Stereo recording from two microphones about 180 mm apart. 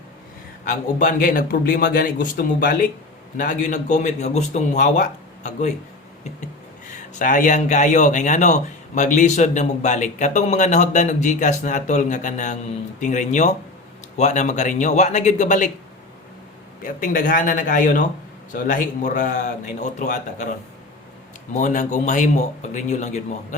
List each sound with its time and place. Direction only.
0.6 s a man's voice: 45° left (ahead or behind)
16.8 s a man's voice: 50° left (ahead or behind)